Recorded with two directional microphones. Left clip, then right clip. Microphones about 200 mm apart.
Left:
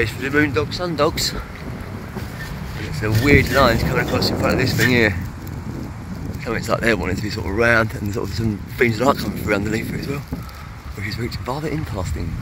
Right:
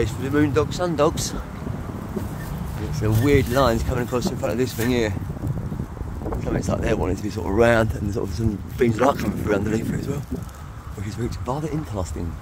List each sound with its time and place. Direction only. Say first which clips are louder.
0.0 s speech: left 3 dB; 5° left (ahead or behind)
0.6 s speech: even; 25° right (ahead or behind)
0.9 s speech: left 2 dB; 10° right (ahead or behind)
3.0 s speech: left 4 dB; 5° right (ahead or behind)
6.4 s speech: left 6 dB; 5° right (ahead or behind)
8.2 s speech: left 2 dB; centre (ahead or behind)
11.1 s speech: left 2 dB; 5° right (ahead or behind)